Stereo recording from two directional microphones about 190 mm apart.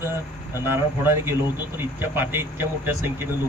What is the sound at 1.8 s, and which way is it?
Speech, 10° right (ahead or behind).